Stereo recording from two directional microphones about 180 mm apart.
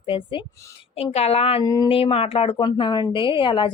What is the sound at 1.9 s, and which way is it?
Speech, 30° left (ahead or behind).